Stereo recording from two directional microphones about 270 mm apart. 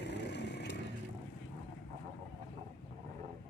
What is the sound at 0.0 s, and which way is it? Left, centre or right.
Vehicle, left.